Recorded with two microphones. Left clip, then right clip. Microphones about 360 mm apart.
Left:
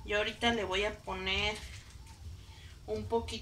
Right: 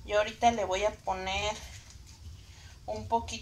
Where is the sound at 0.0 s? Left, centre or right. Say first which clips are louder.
Right 5 dB; centre.